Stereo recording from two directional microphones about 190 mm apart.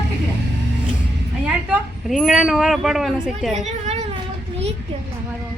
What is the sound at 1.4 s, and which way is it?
Speech, 5° right (ahead or behind).